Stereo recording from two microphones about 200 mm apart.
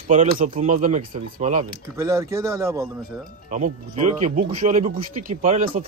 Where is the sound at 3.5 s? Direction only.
40° right (ahead or behind).